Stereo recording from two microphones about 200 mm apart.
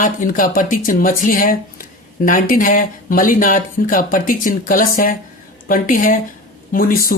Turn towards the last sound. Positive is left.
turn(degrees=45)  # may be behind; listen again after turning